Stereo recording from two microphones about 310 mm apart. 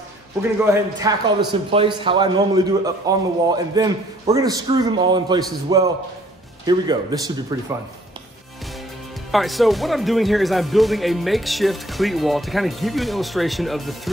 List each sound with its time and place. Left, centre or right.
0.7 s a man's voice: centre
9.3 s speech: centre